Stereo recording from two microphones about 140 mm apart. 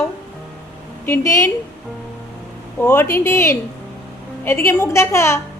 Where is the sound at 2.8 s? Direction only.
15° left (ahead or behind).